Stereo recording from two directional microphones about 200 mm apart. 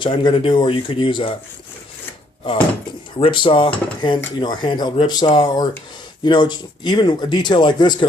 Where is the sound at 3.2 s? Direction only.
25° left (ahead or behind).